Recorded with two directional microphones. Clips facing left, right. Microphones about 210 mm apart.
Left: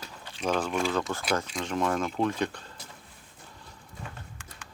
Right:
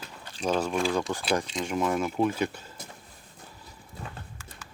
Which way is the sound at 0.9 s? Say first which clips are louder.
Right 1 dB; 15° right (ahead or behind).